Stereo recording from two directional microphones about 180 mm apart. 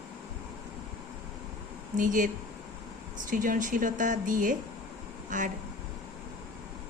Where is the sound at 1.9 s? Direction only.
45° right (ahead or behind).